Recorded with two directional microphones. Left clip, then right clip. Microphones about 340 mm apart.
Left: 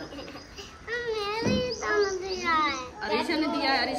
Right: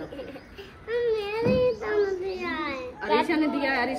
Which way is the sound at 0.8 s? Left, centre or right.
Centre.